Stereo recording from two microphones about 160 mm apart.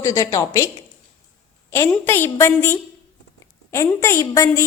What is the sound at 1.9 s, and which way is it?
A woman's voice, 15° left (ahead or behind).